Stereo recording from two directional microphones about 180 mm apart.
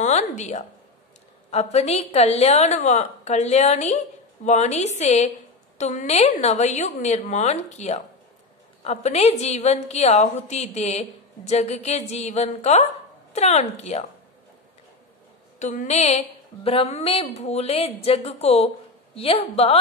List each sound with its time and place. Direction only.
0.0 s a woman's voice: 40° left (ahead or behind)
15.6 s a woman's voice: 40° left (ahead or behind)